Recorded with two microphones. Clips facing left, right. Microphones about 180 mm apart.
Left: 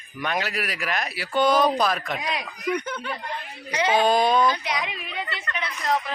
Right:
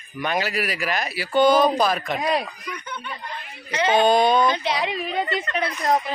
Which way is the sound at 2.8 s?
85° left.